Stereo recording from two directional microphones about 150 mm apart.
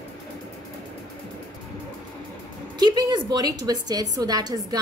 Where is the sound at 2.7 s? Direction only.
30° right (ahead or behind).